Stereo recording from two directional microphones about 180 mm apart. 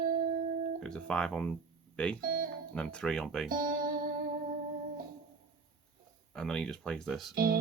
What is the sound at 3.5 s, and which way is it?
Music, 50° right (ahead or behind).